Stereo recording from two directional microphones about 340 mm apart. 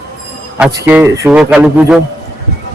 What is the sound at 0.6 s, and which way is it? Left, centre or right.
A man's voice, centre.